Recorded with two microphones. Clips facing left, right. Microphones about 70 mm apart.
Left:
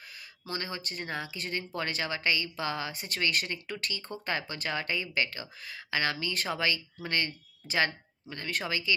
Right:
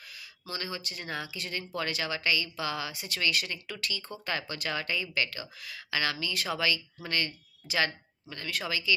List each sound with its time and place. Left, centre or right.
0.5 s speech: left